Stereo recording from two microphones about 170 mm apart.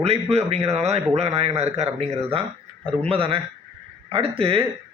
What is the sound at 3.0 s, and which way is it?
A man's voice, 35° right (ahead or behind).